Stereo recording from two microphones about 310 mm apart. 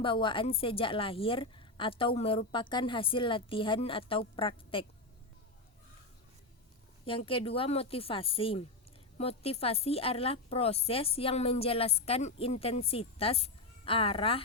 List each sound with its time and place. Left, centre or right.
0.0 s a woman's voice: centre
7.0 s a woman's voice: centre